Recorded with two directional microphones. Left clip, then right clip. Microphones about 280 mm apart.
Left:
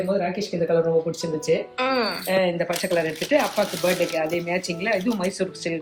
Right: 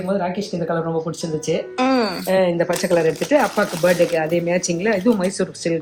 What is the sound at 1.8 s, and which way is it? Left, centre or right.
Speech, centre.